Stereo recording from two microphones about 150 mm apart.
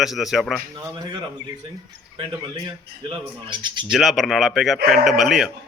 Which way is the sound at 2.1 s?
30° right (ahead or behind).